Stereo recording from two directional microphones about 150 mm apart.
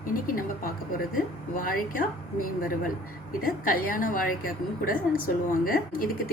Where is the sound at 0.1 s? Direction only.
70° left (ahead or behind).